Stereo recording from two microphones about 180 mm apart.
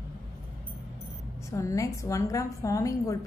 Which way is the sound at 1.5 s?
15° left (ahead or behind).